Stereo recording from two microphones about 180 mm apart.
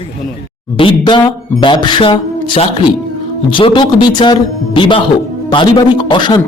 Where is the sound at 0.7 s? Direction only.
30° left (ahead or behind).